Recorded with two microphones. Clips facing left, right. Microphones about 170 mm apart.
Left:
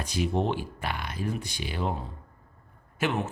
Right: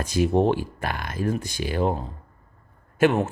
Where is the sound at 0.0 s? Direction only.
45° right (ahead or behind).